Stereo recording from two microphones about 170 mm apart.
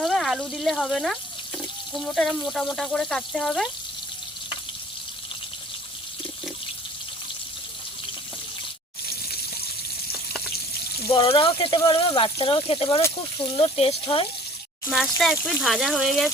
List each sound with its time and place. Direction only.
0.0 s speech: centre (ahead or behind)
11.1 s speech: 30° left (ahead or behind)
14.8 s speech: centre (ahead or behind)